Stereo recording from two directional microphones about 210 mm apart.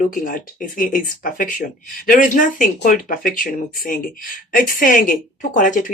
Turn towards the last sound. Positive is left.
turn(degrees=40)  # may be behind; listen again after turning